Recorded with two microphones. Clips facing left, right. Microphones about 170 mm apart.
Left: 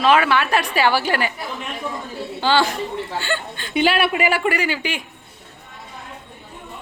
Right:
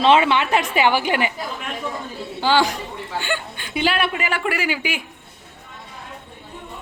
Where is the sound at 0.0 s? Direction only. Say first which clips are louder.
Right 1 dB; 25° right (ahead or behind).